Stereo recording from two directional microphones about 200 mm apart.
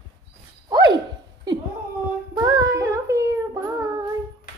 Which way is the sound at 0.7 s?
20° right (ahead or behind).